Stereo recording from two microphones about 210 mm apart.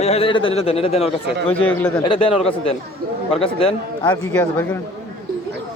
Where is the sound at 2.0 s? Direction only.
25° left (ahead or behind).